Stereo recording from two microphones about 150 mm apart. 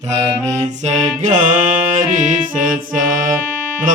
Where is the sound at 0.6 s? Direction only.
50° right (ahead or behind).